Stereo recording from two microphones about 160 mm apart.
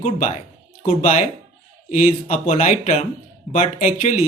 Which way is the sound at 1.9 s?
50° left (ahead or behind).